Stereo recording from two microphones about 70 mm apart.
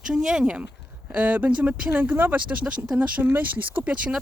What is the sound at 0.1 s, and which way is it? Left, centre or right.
Speech, centre.